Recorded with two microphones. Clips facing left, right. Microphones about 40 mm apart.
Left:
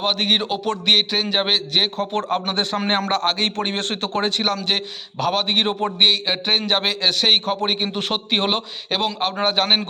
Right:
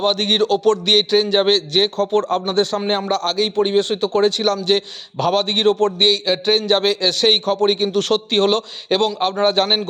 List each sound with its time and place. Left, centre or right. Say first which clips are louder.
0.0 s a man's voice: right 3 dB; centre
2.0 s a man's voice: right 5 dB; left
5.1 s a man's voice: right 2 dB; centre; by 8.6 s left
8.9 s a man's voice: right 5 dB; centre